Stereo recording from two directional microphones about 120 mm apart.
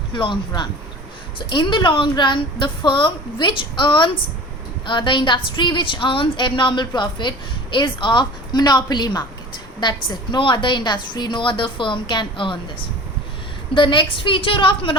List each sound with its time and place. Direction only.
0.1 s a woman's voice: 45° left (ahead or behind)
13.7 s a woman's voice: 40° left (ahead or behind)